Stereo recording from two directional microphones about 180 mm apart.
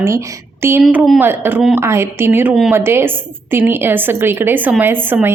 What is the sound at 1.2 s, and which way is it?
A woman's voice, 10° right (ahead or behind).